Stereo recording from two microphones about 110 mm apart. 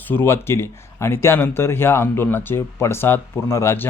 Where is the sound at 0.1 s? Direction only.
20° left (ahead or behind).